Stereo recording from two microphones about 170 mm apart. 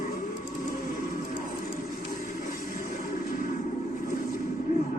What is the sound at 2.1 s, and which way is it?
Vehicle, 55° left (ahead or behind).